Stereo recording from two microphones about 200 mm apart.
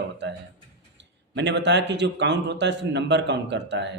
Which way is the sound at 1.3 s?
60° right (ahead or behind).